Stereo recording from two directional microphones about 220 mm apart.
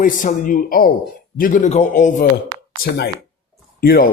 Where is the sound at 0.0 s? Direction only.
35° left (ahead or behind).